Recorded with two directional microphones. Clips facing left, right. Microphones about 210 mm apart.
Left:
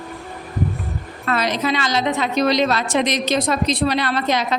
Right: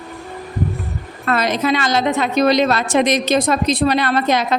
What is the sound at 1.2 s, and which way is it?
A woman's voice, 50° right (ahead or behind).